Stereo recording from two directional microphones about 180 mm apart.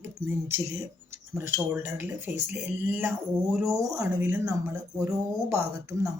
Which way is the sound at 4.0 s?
15° right (ahead or behind).